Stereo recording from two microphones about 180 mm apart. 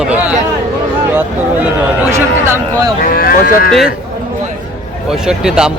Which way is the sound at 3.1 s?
55° left (ahead or behind).